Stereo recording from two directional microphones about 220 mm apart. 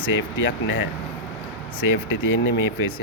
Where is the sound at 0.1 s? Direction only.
60° left (ahead or behind).